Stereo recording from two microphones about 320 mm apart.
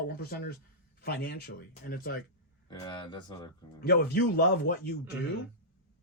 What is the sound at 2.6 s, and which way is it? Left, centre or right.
Speech, centre.